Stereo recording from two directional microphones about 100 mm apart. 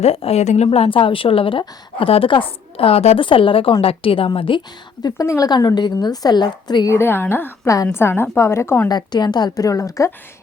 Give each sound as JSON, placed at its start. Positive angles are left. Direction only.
{"t": 0.0, "sound": "a woman's voice", "side_deg": 85}
{"t": 5.0, "sound": "a woman's voice", "side_deg": 35}
{"t": 5.5, "sound": "a woman's voice", "side_deg": 45}
{"t": 6.9, "sound": "a woman's voice", "side_deg": 25}
{"t": 8.9, "sound": "a woman's voice", "side_deg": 45}